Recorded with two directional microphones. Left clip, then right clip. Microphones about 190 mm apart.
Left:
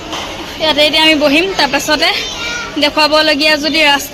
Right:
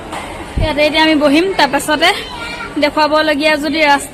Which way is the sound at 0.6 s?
Centre (ahead or behind).